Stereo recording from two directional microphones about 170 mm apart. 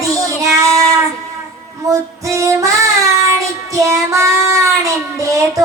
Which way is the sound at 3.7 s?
20° right (ahead or behind).